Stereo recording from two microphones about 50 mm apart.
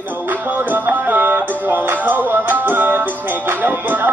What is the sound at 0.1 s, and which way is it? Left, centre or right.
Music, right.